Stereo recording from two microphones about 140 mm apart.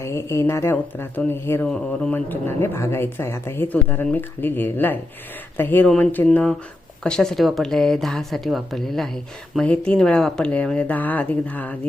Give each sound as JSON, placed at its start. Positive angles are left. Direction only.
{"t": 0.0, "sound": "a woman's voice", "side_deg": 20}